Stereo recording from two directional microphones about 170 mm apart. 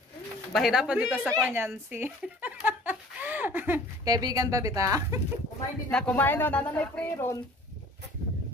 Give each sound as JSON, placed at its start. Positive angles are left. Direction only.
{"t": 0.5, "sound": "speech", "side_deg": 0}
{"t": 4.0, "sound": "speech", "side_deg": -20}
{"t": 5.9, "sound": "speech", "side_deg": 5}